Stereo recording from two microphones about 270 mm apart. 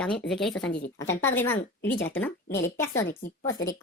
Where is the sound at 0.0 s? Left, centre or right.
Centre.